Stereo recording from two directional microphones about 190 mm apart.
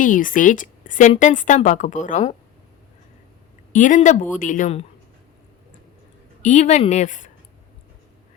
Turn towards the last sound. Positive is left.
turn(degrees=40)  # may be behind; listen again after turning